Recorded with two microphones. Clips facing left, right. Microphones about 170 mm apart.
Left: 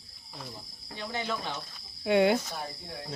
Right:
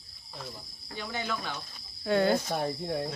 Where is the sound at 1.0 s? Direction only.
25° left (ahead or behind).